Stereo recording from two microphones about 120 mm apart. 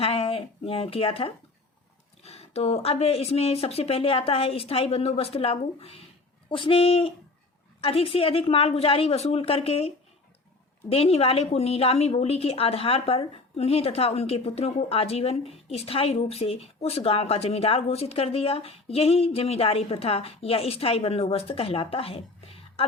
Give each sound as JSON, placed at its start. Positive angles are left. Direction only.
{"t": 0.0, "sound": "a woman's voice", "side_deg": 50}